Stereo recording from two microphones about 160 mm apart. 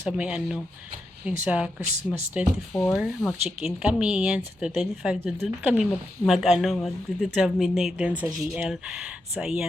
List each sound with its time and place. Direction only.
0.0 s speech: 5° right (ahead or behind)
1.8 s speech: 45° right (ahead or behind)
2.3 s a woman's voice: 5° right (ahead or behind)